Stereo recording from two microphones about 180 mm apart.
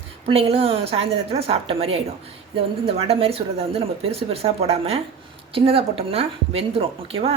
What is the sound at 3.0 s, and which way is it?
Speech, 35° right (ahead or behind).